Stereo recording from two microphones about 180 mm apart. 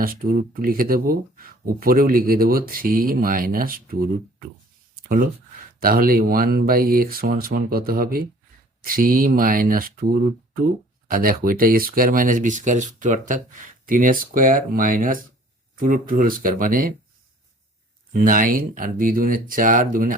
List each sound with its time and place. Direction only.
0.0 s speech: 55° right (ahead or behind)
4.9 s a sound: 50° right (ahead or behind)
5.8 s speech: 55° right (ahead or behind)
11.1 s speech: 55° right (ahead or behind)
18.1 s speech: 50° right (ahead or behind)